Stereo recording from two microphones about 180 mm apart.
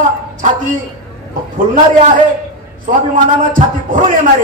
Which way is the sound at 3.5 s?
50° right (ahead or behind).